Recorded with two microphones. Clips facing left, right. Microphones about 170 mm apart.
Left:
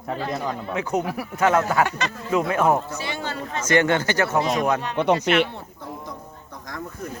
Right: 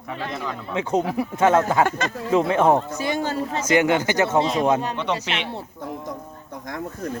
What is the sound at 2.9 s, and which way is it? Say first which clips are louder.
Speech: right 6 dB; 45° right (ahead or behind).